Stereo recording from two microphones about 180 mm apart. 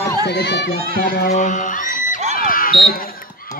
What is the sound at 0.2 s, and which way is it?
Speech, 70° left (ahead or behind).